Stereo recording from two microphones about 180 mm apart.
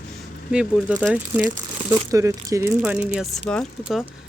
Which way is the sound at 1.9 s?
15° right (ahead or behind).